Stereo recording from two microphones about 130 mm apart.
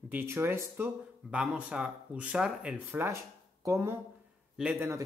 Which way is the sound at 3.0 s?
20° right (ahead or behind).